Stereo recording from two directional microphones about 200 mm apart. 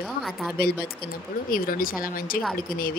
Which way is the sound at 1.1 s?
45° left (ahead or behind).